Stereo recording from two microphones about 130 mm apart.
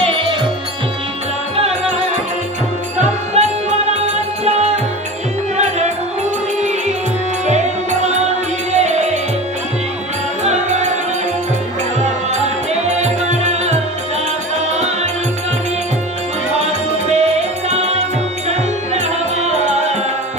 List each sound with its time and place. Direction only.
0.0 s music: 45° right (ahead or behind)
1.6 s music: 55° right (ahead or behind)
3.0 s music: 55° right (ahead or behind)
7.4 s music: 60° right (ahead or behind)
10.4 s music: 60° right (ahead or behind)
12.8 s music: 60° right (ahead or behind)
16.5 s music: 60° right (ahead or behind)